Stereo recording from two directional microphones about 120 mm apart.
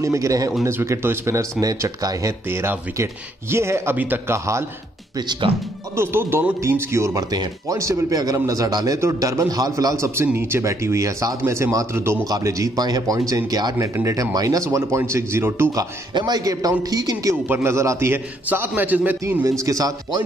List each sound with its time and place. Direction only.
0.0 s speech: 25° right (ahead or behind)
5.5 s speech: 50° right (ahead or behind)
5.9 s speech: 20° right (ahead or behind)
16.2 s speech: 35° right (ahead or behind); by 19.4 s 15° right (ahead or behind)
19.6 s speech: 30° right (ahead or behind)